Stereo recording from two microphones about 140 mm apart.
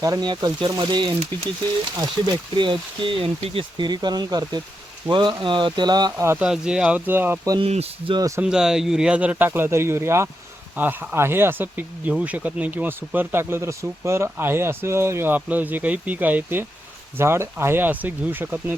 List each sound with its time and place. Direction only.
0.0 s speech: 30° right (ahead or behind)
6.4 s speech: 5° right (ahead or behind)
7.6 s speech: 45° right (ahead or behind)
8.4 s speech: 5° right (ahead or behind)